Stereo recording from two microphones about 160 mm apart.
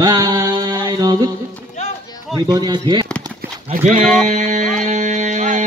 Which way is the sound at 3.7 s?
50° right (ahead or behind).